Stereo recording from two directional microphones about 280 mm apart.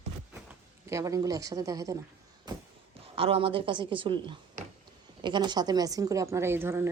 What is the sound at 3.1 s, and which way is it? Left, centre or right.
A woman's voice, centre.